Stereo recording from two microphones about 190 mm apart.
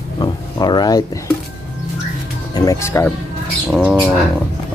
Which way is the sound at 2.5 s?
20° left (ahead or behind).